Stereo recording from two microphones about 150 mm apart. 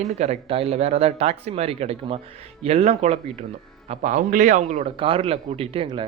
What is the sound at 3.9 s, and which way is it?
A man's voice, 60° right (ahead or behind).